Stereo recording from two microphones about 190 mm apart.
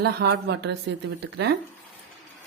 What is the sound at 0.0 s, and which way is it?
Speech, 60° right (ahead or behind).